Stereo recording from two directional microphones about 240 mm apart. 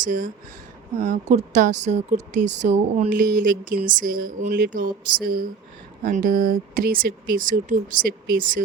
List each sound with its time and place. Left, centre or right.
0.0 s speech: right